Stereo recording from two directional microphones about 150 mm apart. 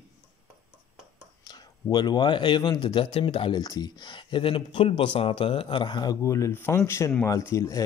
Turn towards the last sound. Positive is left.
turn(degrees=20)  # may be behind; listen again after turning